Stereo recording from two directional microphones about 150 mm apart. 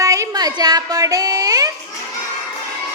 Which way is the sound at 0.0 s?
20° right (ahead or behind).